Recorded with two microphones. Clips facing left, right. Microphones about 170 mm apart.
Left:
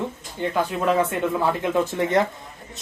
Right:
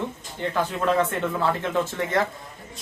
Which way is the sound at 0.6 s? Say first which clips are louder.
Left 1 dB; 10° left (ahead or behind).